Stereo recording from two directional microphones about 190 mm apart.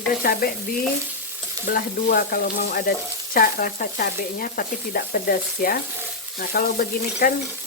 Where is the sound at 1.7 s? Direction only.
50° left (ahead or behind).